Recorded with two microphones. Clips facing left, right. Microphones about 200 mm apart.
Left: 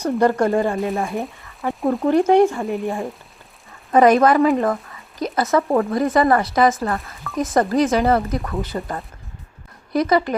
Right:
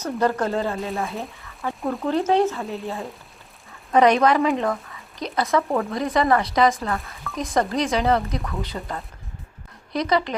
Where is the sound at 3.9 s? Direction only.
45° left (ahead or behind).